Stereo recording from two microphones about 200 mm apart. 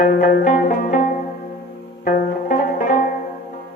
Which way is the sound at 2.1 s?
45° left (ahead or behind).